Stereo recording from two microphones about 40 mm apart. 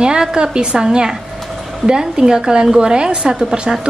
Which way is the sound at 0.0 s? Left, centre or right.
Centre.